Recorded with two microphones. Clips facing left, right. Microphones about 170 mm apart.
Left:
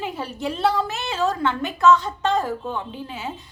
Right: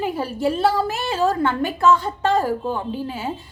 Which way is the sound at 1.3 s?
50° right (ahead or behind).